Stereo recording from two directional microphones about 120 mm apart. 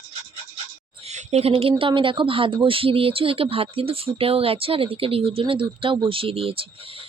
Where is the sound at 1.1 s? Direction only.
60° right (ahead or behind).